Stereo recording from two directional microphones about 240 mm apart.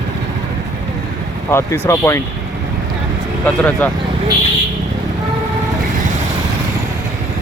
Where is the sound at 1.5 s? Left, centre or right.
Centre.